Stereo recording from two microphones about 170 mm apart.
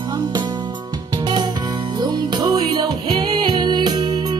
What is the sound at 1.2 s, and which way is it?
Music, 25° right (ahead or behind).